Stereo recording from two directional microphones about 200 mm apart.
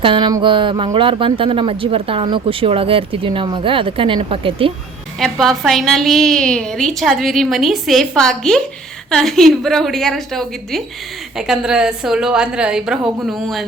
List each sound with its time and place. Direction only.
0.0 s speech: 25° right (ahead or behind)
5.2 s a woman's voice: centre (ahead or behind)